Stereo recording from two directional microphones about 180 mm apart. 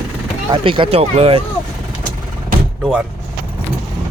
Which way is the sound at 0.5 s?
25° right (ahead or behind).